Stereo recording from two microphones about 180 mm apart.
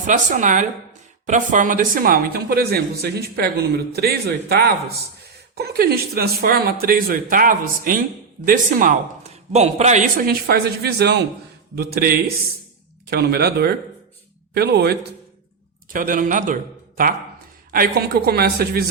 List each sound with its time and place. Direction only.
0.0 s a woman's voice: 45° right (ahead or behind)
10.2 s speech: 60° right (ahead or behind)
15.9 s a woman's voice: 50° right (ahead or behind)
17.7 s speech: 55° right (ahead or behind)